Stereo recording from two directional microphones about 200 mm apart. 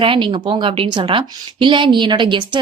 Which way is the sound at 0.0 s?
25° right (ahead or behind).